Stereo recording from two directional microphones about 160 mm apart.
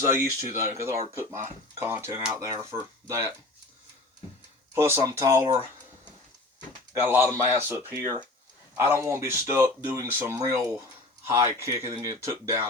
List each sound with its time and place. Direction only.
0.0 s speech: 15° right (ahead or behind)
4.7 s speech: 15° right (ahead or behind)
6.9 s speech: 15° right (ahead or behind)